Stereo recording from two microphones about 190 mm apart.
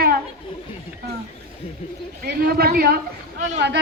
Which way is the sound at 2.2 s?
55° right (ahead or behind).